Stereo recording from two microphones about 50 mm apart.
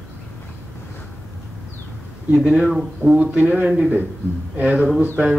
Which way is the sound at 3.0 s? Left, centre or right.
Left.